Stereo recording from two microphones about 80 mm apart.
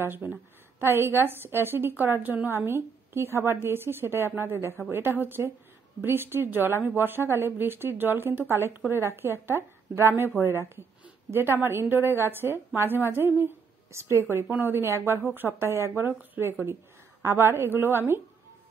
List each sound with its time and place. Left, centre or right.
0.0 s a woman's voice: right